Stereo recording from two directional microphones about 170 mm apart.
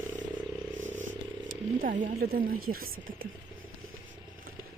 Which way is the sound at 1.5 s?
55° right (ahead or behind).